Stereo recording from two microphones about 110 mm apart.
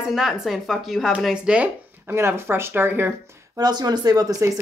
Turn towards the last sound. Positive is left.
turn(degrees=-35)  # may be behind; listen again after turning